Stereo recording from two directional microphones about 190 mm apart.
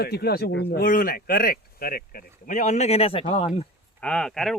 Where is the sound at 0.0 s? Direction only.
55° left (ahead or behind); by 3.7 s 35° left (ahead or behind).